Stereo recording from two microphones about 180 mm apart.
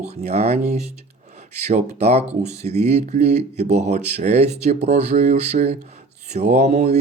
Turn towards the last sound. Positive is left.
turn(degrees=-40)  # may be behind; listen again after turning